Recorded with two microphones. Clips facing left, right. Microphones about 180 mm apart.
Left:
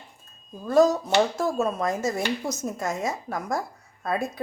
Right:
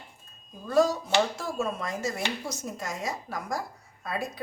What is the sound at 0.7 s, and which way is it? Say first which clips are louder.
A woman's voice: left 4 dB; 40° left (ahead or behind).